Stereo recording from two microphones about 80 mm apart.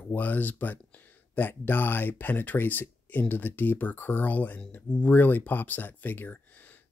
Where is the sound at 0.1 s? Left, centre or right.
Left.